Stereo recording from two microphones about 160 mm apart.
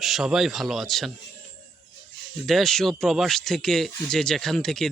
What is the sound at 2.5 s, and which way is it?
Speech, centre (ahead or behind).